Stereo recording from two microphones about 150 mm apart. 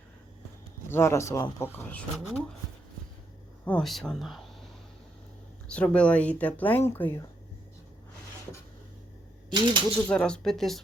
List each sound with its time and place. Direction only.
0.9 s speech: 15° left (ahead or behind)
1.8 s speech: 10° left (ahead or behind)
3.7 s speech: 5° left (ahead or behind)
5.7 s speech: 10° left (ahead or behind)
9.5 s speech: 30° right (ahead or behind)
10.1 s speech: 5° left (ahead or behind)